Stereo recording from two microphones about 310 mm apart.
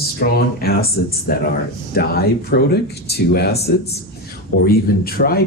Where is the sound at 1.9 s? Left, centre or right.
Left.